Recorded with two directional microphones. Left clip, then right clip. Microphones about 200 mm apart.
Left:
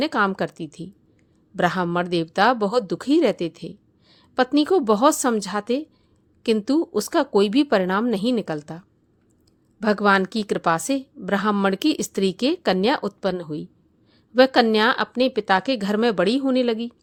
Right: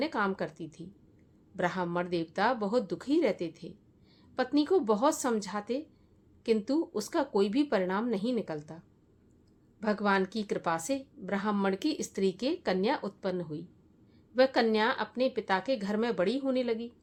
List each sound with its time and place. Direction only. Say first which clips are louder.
0.0 s a woman's voice: left 10 dB; 40° left (ahead or behind)
9.8 s a woman's voice: left 10 dB; 40° left (ahead or behind)